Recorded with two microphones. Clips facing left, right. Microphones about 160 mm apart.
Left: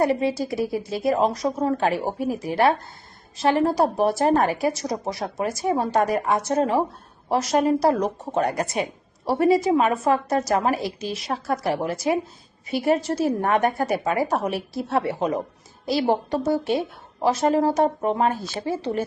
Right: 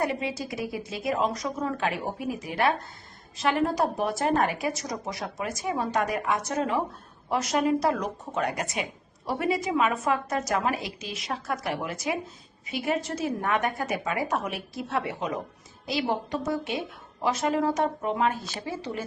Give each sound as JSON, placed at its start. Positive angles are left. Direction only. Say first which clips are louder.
{"t": 0.0, "sound": "a woman's voice", "louder": "left 7 dB", "side_deg": 35}